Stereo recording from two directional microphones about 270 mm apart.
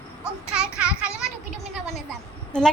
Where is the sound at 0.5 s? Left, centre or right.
Centre.